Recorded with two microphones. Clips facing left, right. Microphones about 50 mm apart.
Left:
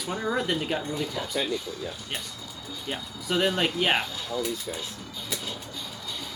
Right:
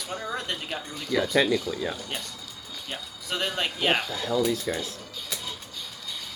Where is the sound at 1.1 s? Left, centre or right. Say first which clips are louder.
Right 7 dB; right.